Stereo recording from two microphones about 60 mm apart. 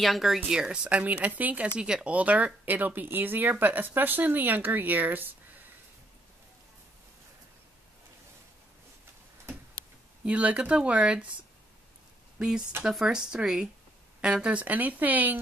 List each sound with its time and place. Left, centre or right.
0.0 s speech: centre; by 1.7 s right
1.8 s speech: centre; by 5.3 s right
10.2 s speech: right
12.4 s speech: centre